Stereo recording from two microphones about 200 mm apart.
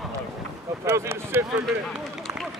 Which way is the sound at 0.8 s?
15° right (ahead or behind).